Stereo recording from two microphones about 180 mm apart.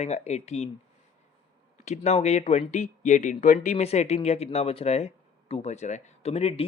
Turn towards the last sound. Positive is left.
turn(degrees=35)  # may be behind; listen again after turning